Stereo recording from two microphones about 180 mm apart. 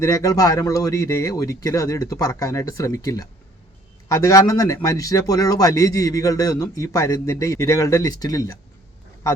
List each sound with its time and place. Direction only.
0.0 s a man's voice: 20° left (ahead or behind)